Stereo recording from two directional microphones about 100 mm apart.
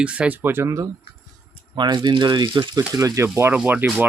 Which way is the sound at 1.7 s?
50° right (ahead or behind).